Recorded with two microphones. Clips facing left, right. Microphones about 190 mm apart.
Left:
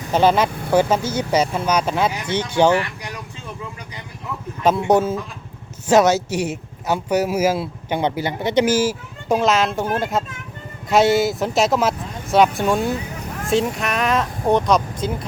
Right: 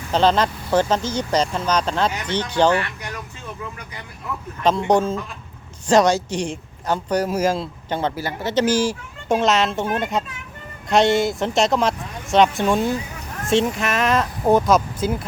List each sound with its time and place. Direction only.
0.1 s speech: 10° left (ahead or behind)
4.6 s speech: 10° left (ahead or behind)